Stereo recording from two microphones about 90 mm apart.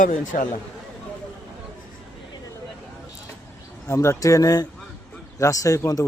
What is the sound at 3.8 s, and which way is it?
A man's voice, 30° left (ahead or behind).